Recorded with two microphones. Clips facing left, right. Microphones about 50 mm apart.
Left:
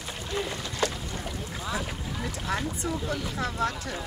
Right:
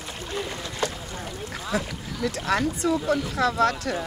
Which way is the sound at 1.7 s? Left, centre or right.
Right.